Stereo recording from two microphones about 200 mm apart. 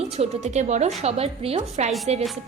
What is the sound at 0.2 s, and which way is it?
A woman's voice, 35° right (ahead or behind).